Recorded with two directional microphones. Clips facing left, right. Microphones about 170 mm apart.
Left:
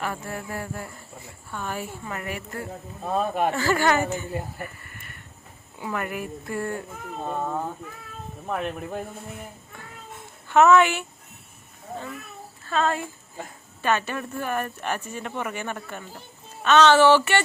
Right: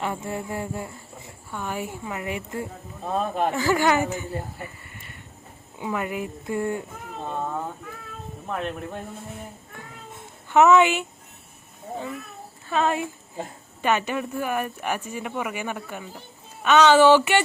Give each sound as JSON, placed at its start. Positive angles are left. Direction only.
{"t": 0.0, "sound": "a sound", "side_deg": -20}
{"t": 1.5, "sound": "speech", "side_deg": -15}
{"t": 3.2, "sound": "speech", "side_deg": 5}
{"t": 3.5, "sound": "speech", "side_deg": -15}
{"t": 5.8, "sound": "speech", "side_deg": -15}
{"t": 8.4, "sound": "speech", "side_deg": 5}
{"t": 10.5, "sound": "speech", "side_deg": -15}
{"t": 12.6, "sound": "speech", "side_deg": -15}